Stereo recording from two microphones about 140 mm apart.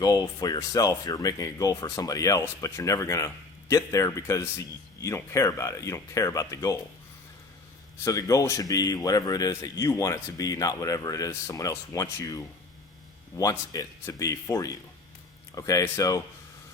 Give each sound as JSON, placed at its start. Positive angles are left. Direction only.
{"t": 0.0, "sound": "speech", "side_deg": 25}
{"t": 8.0, "sound": "speech", "side_deg": 25}